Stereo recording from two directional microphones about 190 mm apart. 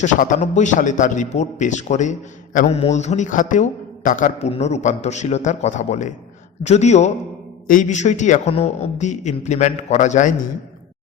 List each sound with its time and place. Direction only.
0.0 s a man's voice: 40° left (ahead or behind)